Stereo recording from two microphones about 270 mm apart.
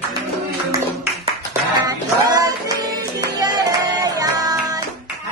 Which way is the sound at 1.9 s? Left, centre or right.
Centre.